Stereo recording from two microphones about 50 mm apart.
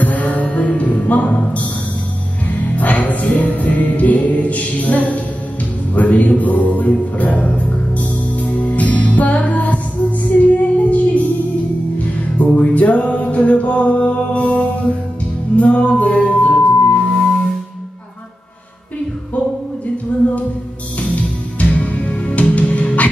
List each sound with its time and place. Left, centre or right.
0.0 s music: left
10.3 s child singing: left
12.4 s music: left
20.1 s music: left